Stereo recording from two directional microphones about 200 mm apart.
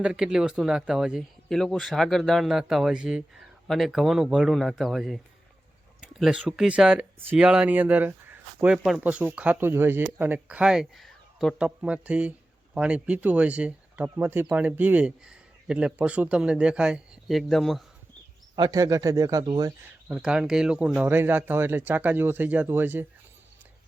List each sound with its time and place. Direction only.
0.0 s a man's voice: 5° right (ahead or behind)
18.5 s speech: 20° right (ahead or behind)
20.1 s speech: 5° right (ahead or behind)